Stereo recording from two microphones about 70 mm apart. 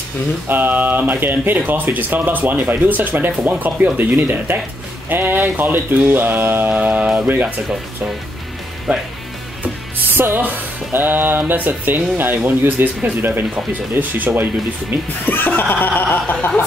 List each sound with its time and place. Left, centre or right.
0.5 s speech: right
10.1 s speech: right
15.2 s speech: left